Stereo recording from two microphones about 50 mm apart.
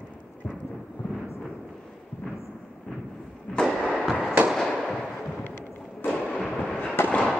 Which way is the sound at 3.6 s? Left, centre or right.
Centre.